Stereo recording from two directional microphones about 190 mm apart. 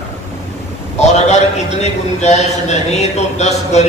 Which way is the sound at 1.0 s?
35° left (ahead or behind).